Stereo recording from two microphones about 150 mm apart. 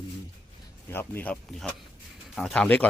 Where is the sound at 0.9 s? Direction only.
15° left (ahead or behind).